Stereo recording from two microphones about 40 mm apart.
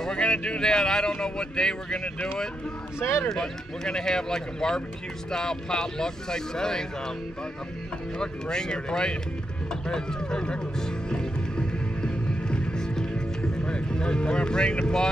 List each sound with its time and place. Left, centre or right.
0.0 s speech: left
3.0 s speech: left
3.3 s speech: centre
8.2 s speech: centre
9.8 s music: centre
13.7 s speech: left